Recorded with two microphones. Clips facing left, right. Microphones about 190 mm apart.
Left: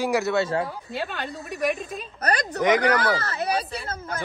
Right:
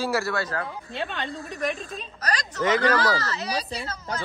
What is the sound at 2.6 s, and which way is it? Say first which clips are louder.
Speech: left 1 dB; 15° left (ahead or behind).